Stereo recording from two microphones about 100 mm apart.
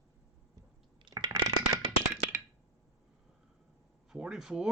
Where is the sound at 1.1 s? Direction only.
40° right (ahead or behind).